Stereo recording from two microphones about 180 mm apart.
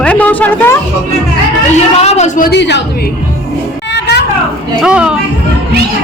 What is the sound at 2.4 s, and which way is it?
Speech, 70° left (ahead or behind).